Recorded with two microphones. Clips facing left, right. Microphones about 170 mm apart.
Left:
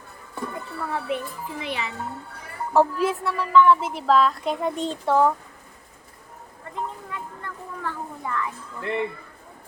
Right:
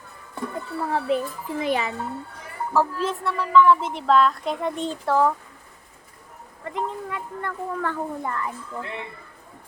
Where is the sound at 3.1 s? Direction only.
Centre (ahead or behind).